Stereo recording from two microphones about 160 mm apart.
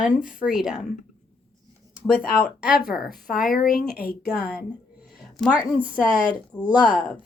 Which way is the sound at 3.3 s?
60° left (ahead or behind).